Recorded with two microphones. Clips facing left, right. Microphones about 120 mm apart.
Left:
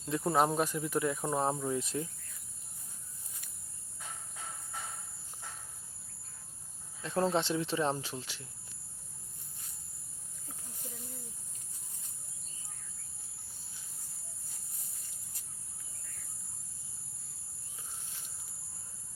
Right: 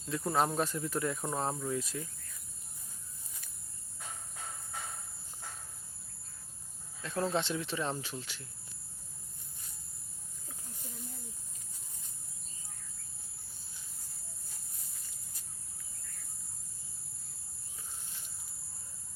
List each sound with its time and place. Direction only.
0.1 s speech: 15° left (ahead or behind)
7.0 s speech: 25° left (ahead or behind)